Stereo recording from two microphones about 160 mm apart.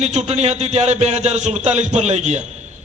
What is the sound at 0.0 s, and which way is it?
A man's voice, 45° right (ahead or behind).